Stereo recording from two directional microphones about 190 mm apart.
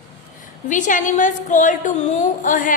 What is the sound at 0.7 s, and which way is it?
A woman's voice, 40° left (ahead or behind).